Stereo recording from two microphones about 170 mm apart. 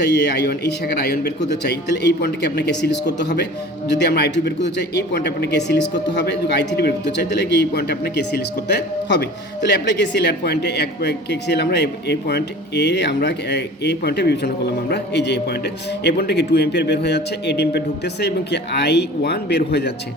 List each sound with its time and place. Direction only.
0.0 s speech: 80° left
3.9 s speech: 75° left (ahead or behind)